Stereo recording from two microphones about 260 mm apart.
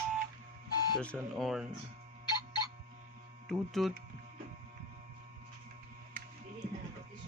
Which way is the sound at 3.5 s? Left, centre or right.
Centre.